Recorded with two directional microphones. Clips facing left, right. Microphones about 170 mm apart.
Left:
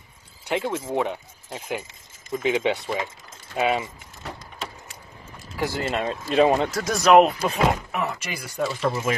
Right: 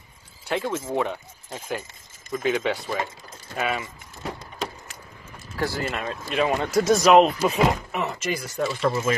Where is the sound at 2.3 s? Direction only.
20° left (ahead or behind).